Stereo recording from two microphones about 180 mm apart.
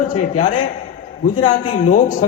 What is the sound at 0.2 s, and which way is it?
A man's voice, 45° left (ahead or behind).